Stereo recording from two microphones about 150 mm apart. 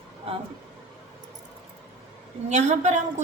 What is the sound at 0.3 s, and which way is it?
Speech, 40° right (ahead or behind).